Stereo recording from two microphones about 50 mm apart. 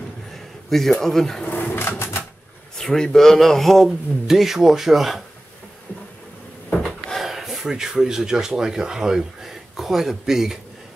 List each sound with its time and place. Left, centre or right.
0.7 s a man's voice: centre
1.4 s a sound: left
1.9 s typewriter: left
2.8 s a man's voice: centre
7.2 s speech: centre